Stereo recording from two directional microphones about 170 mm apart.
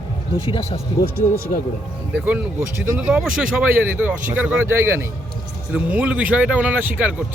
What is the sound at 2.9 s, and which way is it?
Speech, 5° right (ahead or behind).